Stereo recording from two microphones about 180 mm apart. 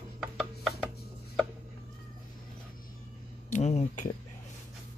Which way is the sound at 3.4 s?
40° left (ahead or behind).